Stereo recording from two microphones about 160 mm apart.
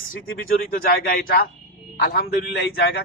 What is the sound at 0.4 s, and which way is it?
A man's voice, 65° left (ahead or behind).